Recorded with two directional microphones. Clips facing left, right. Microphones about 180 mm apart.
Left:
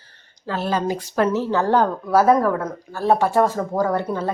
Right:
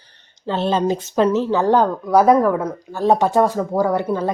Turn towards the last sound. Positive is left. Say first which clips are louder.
# right 3 dB
turn(degrees=-15)  # may be behind; listen again after turning